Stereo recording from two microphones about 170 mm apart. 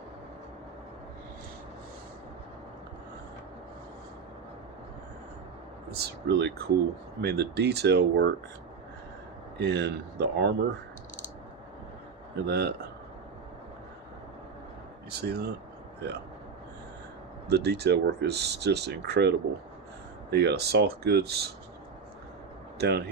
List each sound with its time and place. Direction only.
5.9 s speech: 75° right (ahead or behind)
9.6 s speech: 90° right
12.5 s speech: 75° right (ahead or behind)
15.1 s speech: 70° right (ahead or behind)
17.5 s speech: 75° right (ahead or behind)
20.3 s speech: 75° right (ahead or behind)
22.8 s speech: 70° right (ahead or behind)